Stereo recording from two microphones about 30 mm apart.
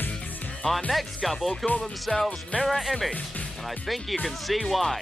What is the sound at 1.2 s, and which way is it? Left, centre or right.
Music, centre.